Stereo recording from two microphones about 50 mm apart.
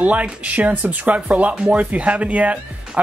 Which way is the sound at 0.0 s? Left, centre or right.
Right.